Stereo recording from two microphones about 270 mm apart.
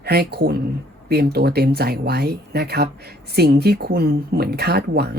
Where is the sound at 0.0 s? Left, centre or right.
Right.